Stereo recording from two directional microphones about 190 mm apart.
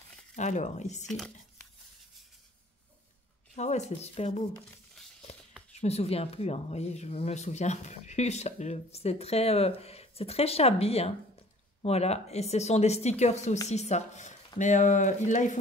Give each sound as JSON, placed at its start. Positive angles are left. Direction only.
{"t": 0.4, "sound": "speech", "side_deg": 40}
{"t": 1.0, "sound": "speech", "side_deg": 5}
{"t": 3.5, "sound": "speech", "side_deg": 35}
{"t": 4.6, "sound": "a sound", "side_deg": 0}
{"t": 5.8, "sound": "speech", "side_deg": 35}